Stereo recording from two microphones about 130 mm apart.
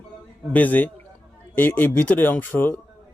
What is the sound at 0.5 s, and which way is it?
A man's voice, 15° left (ahead or behind).